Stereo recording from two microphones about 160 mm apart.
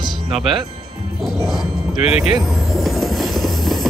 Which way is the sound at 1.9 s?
40° left (ahead or behind).